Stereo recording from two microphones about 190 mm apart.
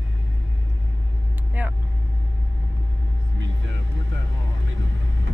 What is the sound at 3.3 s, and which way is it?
Vehicle, 85° right.